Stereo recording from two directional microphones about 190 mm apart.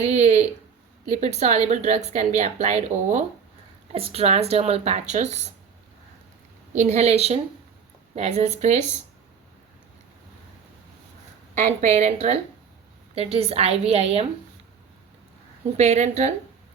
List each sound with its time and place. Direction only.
0.0 s a sound: 35° right (ahead or behind)
1.0 s a woman's voice: 35° right (ahead or behind)
6.7 s a woman's voice: 35° right (ahead or behind)
11.5 s a woman's voice: 40° right (ahead or behind)
15.8 s a woman's voice: 35° right (ahead or behind)